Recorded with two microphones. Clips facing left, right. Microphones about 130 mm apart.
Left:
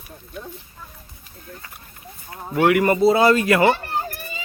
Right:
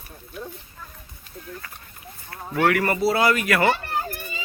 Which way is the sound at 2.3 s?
20° left (ahead or behind).